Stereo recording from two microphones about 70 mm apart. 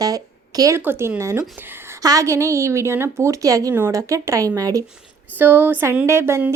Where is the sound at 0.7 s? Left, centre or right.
Right.